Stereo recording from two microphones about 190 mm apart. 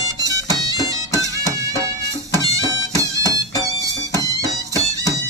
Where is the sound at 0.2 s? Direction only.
20° right (ahead or behind).